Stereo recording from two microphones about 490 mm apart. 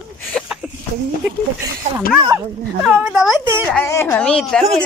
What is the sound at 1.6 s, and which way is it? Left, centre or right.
Speech, centre.